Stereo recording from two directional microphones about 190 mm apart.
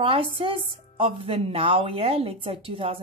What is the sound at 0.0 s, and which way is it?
A woman's voice, 25° right (ahead or behind).